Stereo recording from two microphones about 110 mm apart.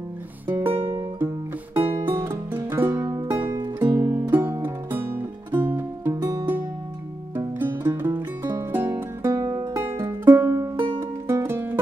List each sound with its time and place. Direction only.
0.7 s music: 55° right (ahead or behind)
2.0 s music: 20° right (ahead or behind)